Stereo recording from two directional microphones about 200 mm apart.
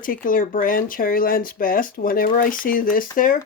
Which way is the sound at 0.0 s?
45° left (ahead or behind).